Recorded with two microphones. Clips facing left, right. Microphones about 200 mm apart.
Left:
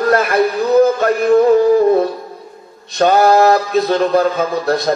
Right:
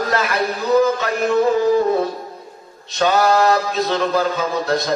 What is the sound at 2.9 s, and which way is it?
Mantra, 55° left (ahead or behind).